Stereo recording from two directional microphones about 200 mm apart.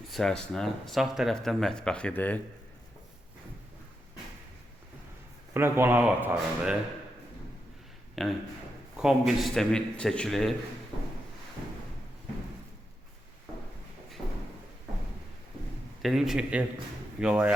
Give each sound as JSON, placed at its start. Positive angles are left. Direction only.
{"t": 0.1, "sound": "speech", "side_deg": 5}
{"t": 5.5, "sound": "speech", "side_deg": -10}
{"t": 8.2, "sound": "speech", "side_deg": 0}
{"t": 16.0, "sound": "speech", "side_deg": 0}